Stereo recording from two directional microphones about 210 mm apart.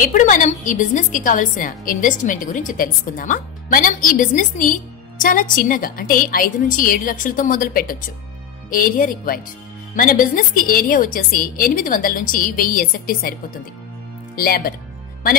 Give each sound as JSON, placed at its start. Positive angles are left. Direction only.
{"t": 0.0, "sound": "a woman's voice", "side_deg": 40}